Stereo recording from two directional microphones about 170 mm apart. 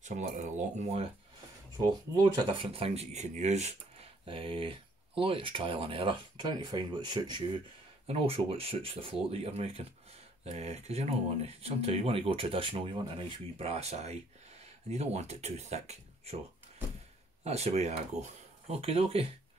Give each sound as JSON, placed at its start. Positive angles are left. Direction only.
{"t": 0.0, "sound": "speech", "side_deg": -45}
{"t": 2.1, "sound": "speech", "side_deg": -25}
{"t": 17.4, "sound": "speech", "side_deg": -40}